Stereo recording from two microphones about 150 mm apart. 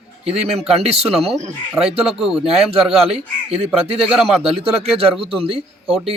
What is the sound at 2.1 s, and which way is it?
Speech, centre (ahead or behind).